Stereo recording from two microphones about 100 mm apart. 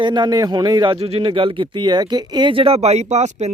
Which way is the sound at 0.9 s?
70° right (ahead or behind).